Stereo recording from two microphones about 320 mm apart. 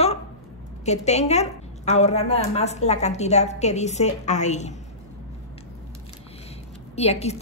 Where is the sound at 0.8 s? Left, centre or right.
Left.